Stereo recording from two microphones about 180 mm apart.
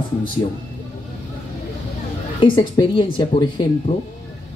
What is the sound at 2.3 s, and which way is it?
Speech, 30° left (ahead or behind).